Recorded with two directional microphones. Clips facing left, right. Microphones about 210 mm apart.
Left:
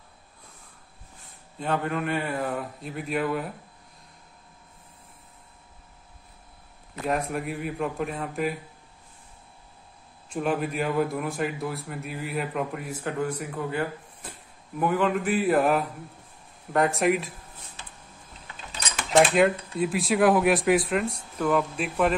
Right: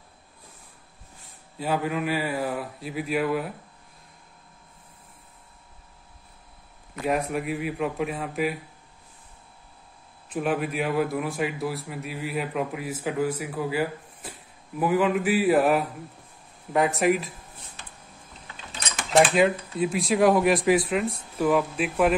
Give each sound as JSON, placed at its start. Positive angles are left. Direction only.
{"t": 1.6, "sound": "a man's voice", "side_deg": -5}
{"t": 7.1, "sound": "a man's voice", "side_deg": 0}
{"t": 10.3, "sound": "a man's voice", "side_deg": -5}
{"t": 19.3, "sound": "a man's voice", "side_deg": 0}